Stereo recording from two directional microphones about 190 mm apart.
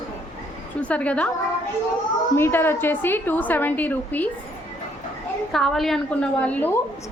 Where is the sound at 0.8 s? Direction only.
5° left (ahead or behind).